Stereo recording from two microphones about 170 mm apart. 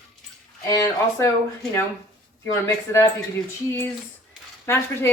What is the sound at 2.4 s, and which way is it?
Speech, 15° left (ahead or behind).